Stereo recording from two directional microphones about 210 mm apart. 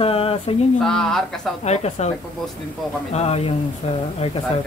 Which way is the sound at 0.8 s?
Centre (ahead or behind).